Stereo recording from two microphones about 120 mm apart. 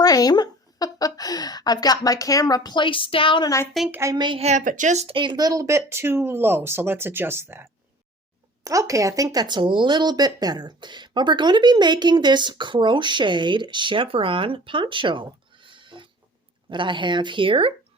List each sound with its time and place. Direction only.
0.0 s a woman's voice: 30° left (ahead or behind); by 3.4 s 45° left (ahead or behind)
3.4 s speech: 25° left (ahead or behind)
3.9 s speech: 25° right (ahead or behind)
4.4 s speech: 80° right
5.0 s speech: 45° right (ahead or behind)